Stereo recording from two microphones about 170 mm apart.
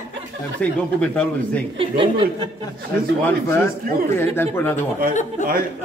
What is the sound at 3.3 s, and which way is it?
Speech, 15° left (ahead or behind).